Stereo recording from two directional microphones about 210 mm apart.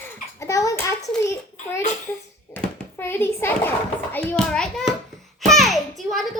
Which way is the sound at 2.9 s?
10° left (ahead or behind).